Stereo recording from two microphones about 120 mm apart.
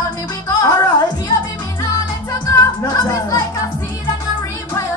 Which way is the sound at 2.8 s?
30° left (ahead or behind).